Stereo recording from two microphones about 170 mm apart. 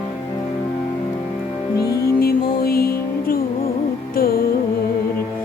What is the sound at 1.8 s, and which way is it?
Music, 20° left (ahead or behind).